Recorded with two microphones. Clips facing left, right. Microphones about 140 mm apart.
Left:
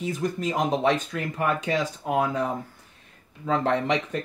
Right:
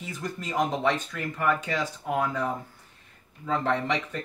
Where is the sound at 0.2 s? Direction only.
20° left (ahead or behind).